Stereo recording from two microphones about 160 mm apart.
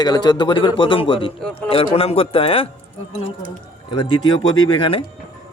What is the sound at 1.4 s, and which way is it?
Speech, 5° left (ahead or behind).